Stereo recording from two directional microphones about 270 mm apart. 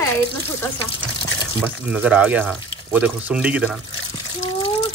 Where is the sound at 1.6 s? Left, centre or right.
Centre.